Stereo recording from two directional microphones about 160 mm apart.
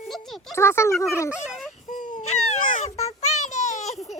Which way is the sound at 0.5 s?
15° left (ahead or behind).